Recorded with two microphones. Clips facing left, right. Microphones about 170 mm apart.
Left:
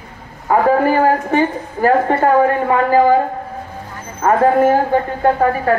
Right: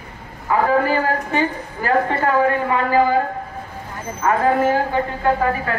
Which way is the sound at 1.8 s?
45° left (ahead or behind).